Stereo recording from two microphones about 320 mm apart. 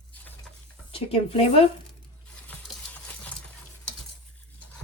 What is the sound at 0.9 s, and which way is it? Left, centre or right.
Speech, centre.